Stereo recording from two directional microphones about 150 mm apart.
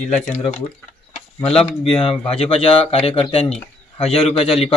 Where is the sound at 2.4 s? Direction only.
40° left (ahead or behind).